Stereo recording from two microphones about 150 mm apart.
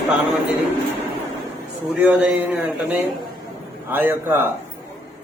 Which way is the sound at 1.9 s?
10° right (ahead or behind).